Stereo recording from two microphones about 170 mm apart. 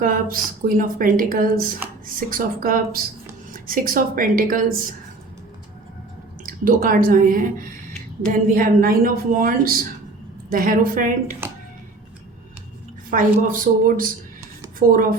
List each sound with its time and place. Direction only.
0.0 s a woman's voice: 55° right (ahead or behind)
6.4 s a woman's voice: 55° right (ahead or behind)
13.1 s speech: 50° right (ahead or behind)